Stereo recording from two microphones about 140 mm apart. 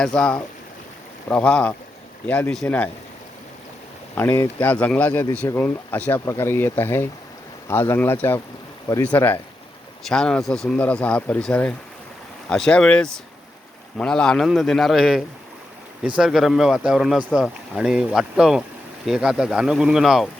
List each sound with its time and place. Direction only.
0.0 s speech: 5° left (ahead or behind)
4.1 s speech: 15° left (ahead or behind); by 20.2 s 5° right (ahead or behind)